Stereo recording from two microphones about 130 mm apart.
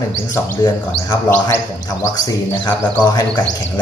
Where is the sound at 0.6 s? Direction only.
30° left (ahead or behind).